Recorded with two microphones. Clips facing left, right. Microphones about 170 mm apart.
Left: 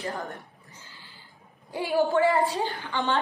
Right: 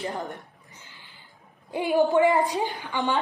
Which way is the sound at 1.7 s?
20° right (ahead or behind).